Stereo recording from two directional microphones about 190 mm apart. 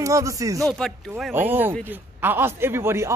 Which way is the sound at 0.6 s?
5° left (ahead or behind).